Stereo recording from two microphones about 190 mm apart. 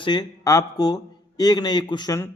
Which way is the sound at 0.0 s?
20° left (ahead or behind).